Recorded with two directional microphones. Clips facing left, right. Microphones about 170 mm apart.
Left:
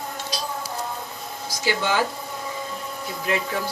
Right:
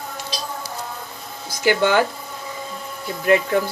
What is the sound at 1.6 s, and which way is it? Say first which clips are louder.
Speech: right 6 dB; 55° right (ahead or behind).